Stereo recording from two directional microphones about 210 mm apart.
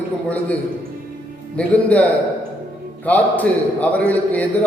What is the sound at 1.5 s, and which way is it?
Speech, 5° left (ahead or behind).